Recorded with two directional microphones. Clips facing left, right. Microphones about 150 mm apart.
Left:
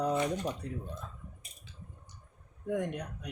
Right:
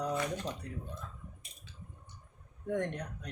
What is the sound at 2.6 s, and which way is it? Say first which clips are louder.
Speech: left 1 dB; 10° left (ahead or behind).